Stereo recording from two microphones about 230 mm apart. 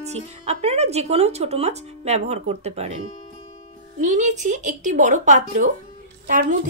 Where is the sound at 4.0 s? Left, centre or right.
Right.